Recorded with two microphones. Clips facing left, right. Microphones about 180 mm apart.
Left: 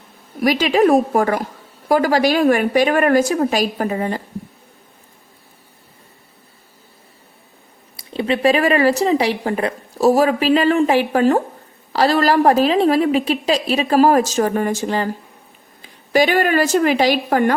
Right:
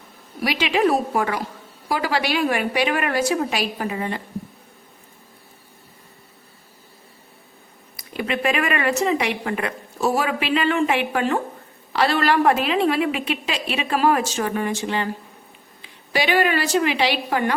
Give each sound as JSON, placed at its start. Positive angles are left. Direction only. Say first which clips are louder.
{"t": 0.4, "sound": "a woman's voice", "louder": "left 6 dB", "side_deg": 45}
{"t": 7.9, "sound": "a woman's voice", "louder": "left 5 dB", "side_deg": 30}